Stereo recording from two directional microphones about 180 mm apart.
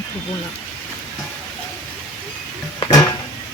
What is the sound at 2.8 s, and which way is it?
Music, 20° left (ahead or behind).